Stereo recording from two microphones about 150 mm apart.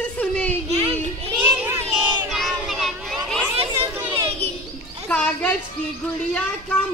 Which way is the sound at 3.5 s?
35° right (ahead or behind).